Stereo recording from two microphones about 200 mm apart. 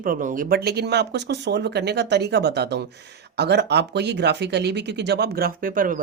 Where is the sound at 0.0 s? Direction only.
40° right (ahead or behind).